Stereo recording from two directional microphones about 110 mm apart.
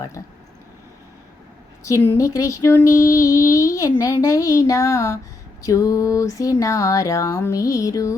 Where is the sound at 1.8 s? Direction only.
25° left (ahead or behind).